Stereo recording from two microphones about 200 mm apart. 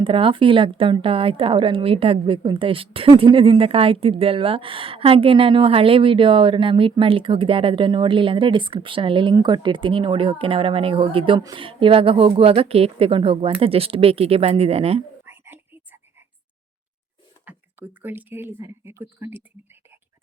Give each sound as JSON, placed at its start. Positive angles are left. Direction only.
{"t": 0.0, "sound": "a woman's voice", "side_deg": -25}
{"t": 15.3, "sound": "whispering", "side_deg": -10}
{"t": 17.4, "sound": "speech", "side_deg": -10}